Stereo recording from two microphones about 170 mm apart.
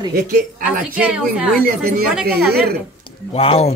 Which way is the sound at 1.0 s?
5° right (ahead or behind).